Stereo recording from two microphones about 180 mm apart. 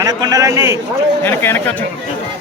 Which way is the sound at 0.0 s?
20° right (ahead or behind).